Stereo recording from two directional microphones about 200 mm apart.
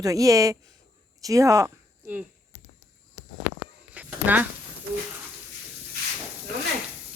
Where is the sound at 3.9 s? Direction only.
10° right (ahead or behind).